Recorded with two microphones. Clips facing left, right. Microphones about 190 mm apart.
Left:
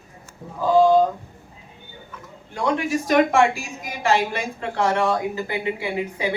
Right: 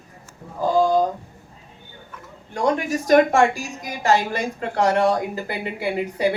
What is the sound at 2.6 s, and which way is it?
Speech, 40° right (ahead or behind).